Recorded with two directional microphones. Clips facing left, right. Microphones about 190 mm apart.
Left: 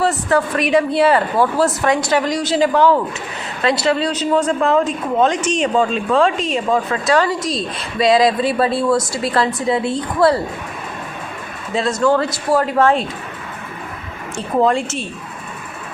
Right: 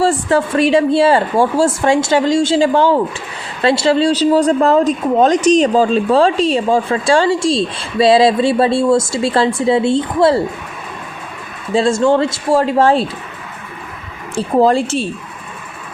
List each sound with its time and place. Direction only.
0.0 s speech: 30° right (ahead or behind)
11.7 s speech: 30° right (ahead or behind)
14.3 s a woman's voice: 35° right (ahead or behind)